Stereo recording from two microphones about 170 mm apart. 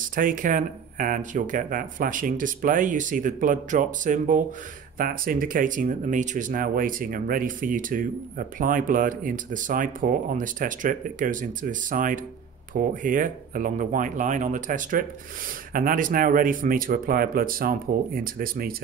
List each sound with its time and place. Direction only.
0.0 s speech: 55° right (ahead or behind)